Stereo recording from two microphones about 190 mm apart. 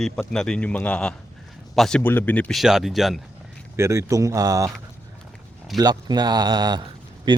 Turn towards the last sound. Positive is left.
turn(degrees=-25)  # may be behind; listen again after turning